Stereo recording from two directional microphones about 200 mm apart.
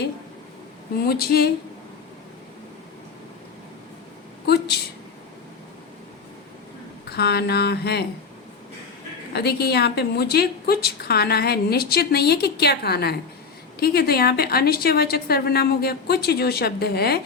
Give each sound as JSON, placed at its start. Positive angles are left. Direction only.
{"t": 0.9, "sound": "a woman's voice", "side_deg": 50}
{"t": 4.4, "sound": "speech", "side_deg": 55}
{"t": 7.1, "sound": "a woman's voice", "side_deg": 55}
{"t": 9.3, "sound": "a woman's voice", "side_deg": 55}